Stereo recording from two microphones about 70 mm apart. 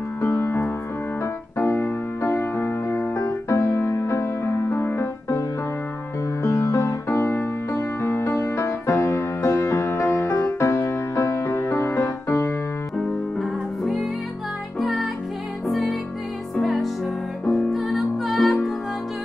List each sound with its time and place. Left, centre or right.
0.2 s music: left
3.3 s music: left
6.4 s music: left
13.4 s music: centre